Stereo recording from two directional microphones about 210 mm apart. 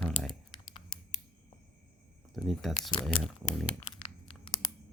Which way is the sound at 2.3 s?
Centre (ahead or behind).